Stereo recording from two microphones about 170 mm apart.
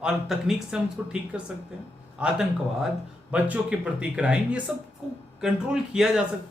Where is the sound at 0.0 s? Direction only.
5° right (ahead or behind).